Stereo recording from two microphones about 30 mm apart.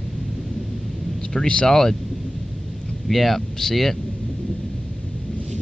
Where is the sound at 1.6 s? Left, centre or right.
Centre.